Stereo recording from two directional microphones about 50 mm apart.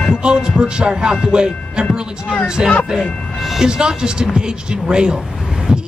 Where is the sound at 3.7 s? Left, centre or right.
Centre.